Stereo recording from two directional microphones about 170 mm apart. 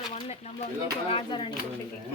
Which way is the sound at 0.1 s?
35° left (ahead or behind).